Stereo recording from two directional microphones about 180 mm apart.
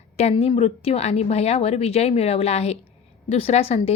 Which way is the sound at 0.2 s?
35° left (ahead or behind).